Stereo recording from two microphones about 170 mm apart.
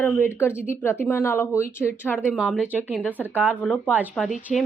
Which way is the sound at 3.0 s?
10° left (ahead or behind).